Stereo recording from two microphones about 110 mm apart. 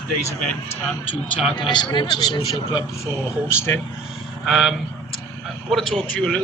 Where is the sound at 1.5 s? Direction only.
45° left (ahead or behind).